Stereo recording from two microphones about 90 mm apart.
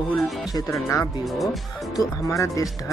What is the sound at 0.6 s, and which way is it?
Speech, 35° left (ahead or behind).